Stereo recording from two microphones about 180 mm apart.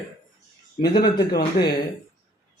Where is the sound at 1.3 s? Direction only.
60° left (ahead or behind).